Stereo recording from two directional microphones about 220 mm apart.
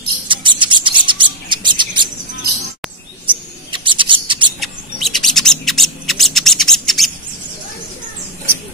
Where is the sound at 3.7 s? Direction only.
20° right (ahead or behind).